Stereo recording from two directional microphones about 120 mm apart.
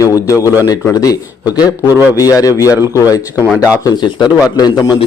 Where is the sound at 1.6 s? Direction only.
15° right (ahead or behind).